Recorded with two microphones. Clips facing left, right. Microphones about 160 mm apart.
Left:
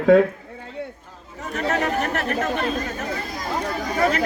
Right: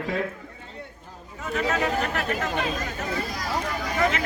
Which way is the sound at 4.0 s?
35° left (ahead or behind).